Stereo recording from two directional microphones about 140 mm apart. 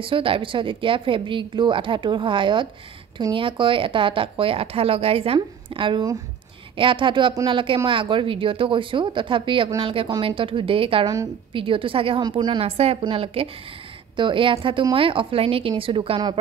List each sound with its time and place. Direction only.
0.0 s a woman's voice: 40° right (ahead or behind)